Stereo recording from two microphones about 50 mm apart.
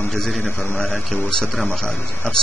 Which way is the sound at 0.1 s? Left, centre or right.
Centre.